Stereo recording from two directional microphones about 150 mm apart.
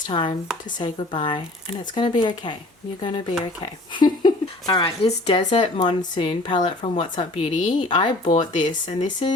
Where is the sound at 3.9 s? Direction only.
30° left (ahead or behind); by 7.7 s 45° left (ahead or behind).